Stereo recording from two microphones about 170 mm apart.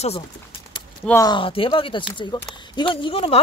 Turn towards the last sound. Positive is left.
turn(degrees=30)  # may be behind; listen again after turning